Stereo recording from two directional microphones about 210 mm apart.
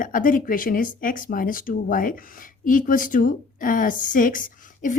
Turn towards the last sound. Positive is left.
turn(degrees=40)  # may be behind; listen again after turning